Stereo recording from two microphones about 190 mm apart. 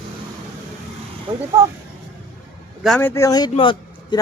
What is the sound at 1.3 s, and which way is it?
Speech, 25° right (ahead or behind).